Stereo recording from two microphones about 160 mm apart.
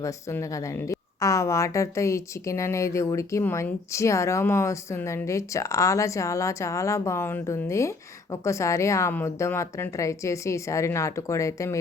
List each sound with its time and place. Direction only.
0.0 s a woman's voice: 20° left (ahead or behind)